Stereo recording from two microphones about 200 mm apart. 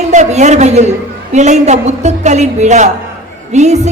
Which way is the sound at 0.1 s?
35° right (ahead or behind).